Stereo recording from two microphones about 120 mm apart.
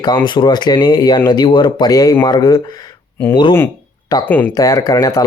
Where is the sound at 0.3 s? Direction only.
35° left (ahead or behind).